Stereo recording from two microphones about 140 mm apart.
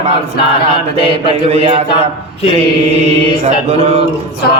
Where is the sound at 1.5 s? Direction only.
45° right (ahead or behind).